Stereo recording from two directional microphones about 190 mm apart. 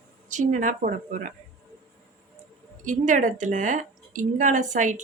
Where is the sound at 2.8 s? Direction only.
40° right (ahead or behind).